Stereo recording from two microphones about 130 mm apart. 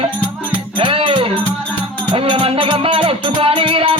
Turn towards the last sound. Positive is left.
turn(degrees=-45)  # may be behind; listen again after turning